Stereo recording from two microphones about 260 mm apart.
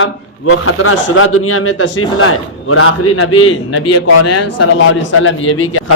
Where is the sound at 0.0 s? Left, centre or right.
Left.